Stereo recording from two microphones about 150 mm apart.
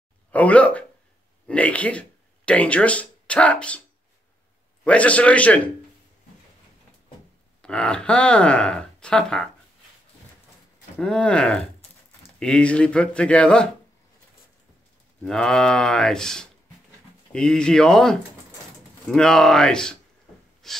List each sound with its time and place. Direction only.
0.3 s speech: 10° left (ahead or behind)
4.8 s speech: 10° left (ahead or behind)
7.6 s speech: 5° left (ahead or behind)
11.0 s speech: 5° left (ahead or behind)
15.2 s speech: 5° left (ahead or behind)
20.6 s wood: centre (ahead or behind)